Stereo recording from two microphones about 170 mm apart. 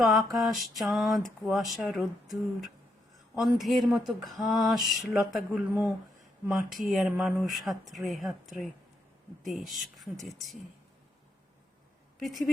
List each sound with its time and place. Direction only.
0.0 s speech: centre (ahead or behind)
3.3 s speech: centre (ahead or behind)
12.2 s speech: centre (ahead or behind)